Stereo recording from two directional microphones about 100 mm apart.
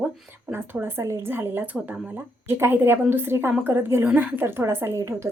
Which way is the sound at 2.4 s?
25° right (ahead or behind).